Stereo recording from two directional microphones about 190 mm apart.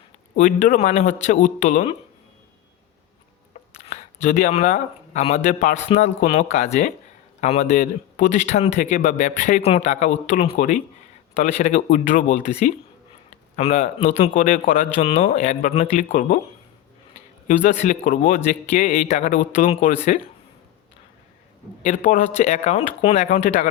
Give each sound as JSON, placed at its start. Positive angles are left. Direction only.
{"t": 0.3, "sound": "speech", "side_deg": 45}
{"t": 3.8, "sound": "a sound", "side_deg": 35}
{"t": 4.3, "sound": "speech", "side_deg": 40}
{"t": 11.3, "sound": "speech", "side_deg": 35}
{"t": 11.7, "sound": "speech", "side_deg": 45}
{"t": 17.5, "sound": "speech", "side_deg": 35}
{"t": 19.0, "sound": "speech", "side_deg": 40}
{"t": 21.8, "sound": "speech", "side_deg": 45}